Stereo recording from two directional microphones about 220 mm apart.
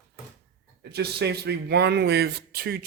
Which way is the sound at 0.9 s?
50° right (ahead or behind).